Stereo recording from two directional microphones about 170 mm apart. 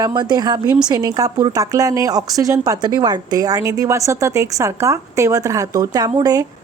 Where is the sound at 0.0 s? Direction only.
25° right (ahead or behind).